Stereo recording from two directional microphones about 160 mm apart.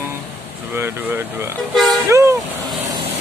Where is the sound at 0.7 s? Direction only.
15° right (ahead or behind).